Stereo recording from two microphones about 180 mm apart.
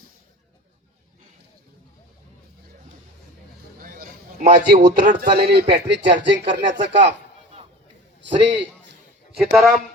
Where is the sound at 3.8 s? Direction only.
50° right (ahead or behind).